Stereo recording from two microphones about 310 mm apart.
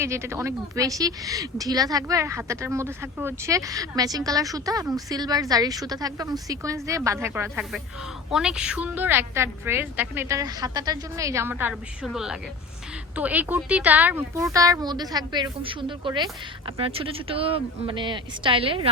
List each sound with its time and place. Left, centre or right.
0.0 s a woman's voice: centre